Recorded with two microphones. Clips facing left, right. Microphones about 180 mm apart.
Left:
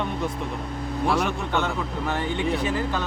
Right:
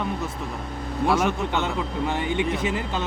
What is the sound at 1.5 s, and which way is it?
Speech, 20° right (ahead or behind).